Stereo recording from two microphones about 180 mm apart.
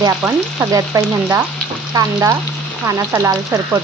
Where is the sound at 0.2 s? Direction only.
15° right (ahead or behind).